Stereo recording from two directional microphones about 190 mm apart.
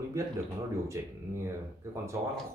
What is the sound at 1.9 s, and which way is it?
Speech, 15° right (ahead or behind).